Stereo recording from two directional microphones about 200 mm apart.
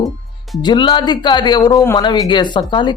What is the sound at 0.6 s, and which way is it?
Speech, 20° left (ahead or behind).